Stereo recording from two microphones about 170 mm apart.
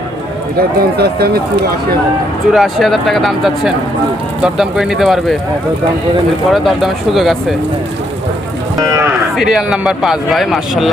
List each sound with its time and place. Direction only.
0.5 s speech: 65° right (ahead or behind)
2.5 s a man's voice: centre (ahead or behind)
6.5 s a man's voice: centre (ahead or behind)
8.8 s speech: 20° right (ahead or behind)
9.3 s a man's voice: centre (ahead or behind)